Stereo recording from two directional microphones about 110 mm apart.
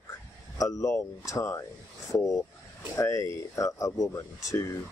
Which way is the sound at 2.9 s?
25° left (ahead or behind).